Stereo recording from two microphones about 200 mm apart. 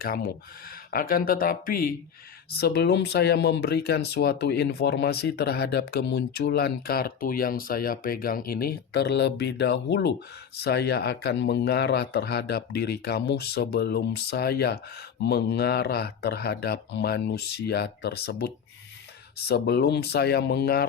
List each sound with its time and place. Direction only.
0.0 s speech: 50° left (ahead or behind)